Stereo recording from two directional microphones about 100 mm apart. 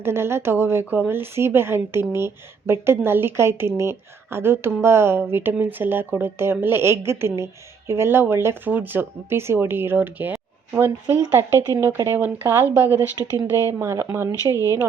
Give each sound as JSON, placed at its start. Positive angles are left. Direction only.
{"t": 0.0, "sound": "speech", "side_deg": -25}